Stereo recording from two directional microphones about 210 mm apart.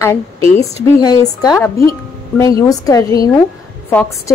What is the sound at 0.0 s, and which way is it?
A woman's voice, 15° left (ahead or behind).